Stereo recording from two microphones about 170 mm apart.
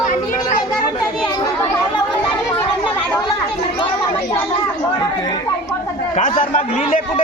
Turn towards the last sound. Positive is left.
turn(degrees=50)  # may be behind; listen again after turning